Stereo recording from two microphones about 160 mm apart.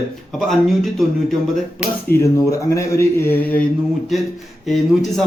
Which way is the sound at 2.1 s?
20° left (ahead or behind).